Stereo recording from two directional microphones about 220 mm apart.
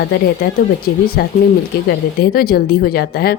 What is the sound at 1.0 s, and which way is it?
A woman's voice, 45° left (ahead or behind).